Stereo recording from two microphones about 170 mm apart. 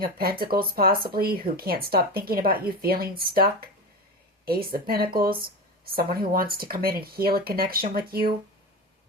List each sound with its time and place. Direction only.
0.0 s speech: 60° right (ahead or behind)